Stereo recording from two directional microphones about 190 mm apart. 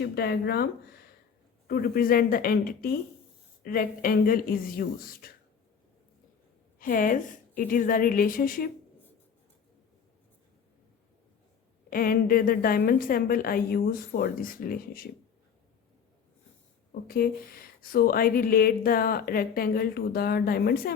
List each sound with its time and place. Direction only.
0.0 s a woman's voice: 55° left (ahead or behind)
6.7 s a woman's voice: 50° left (ahead or behind)
11.9 s a woman's voice: 50° left (ahead or behind)
16.9 s a woman's voice: 50° left (ahead or behind)